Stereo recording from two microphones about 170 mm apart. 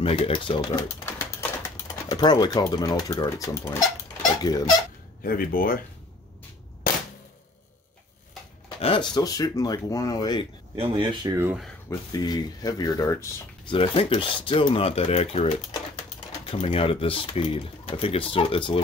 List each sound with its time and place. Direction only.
0.0 s speech: 30° left (ahead or behind)
5.2 s speech: 55° left (ahead or behind)
8.6 s speech: 30° left (ahead or behind)
10.8 s speech: 30° right (ahead or behind)
11.3 s speech: 10° right (ahead or behind)
11.9 s speech: 20° left (ahead or behind)
13.7 s speech: 35° left (ahead or behind)